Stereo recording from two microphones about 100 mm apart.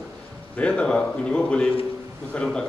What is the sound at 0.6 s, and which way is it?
A man's voice, 10° left (ahead or behind).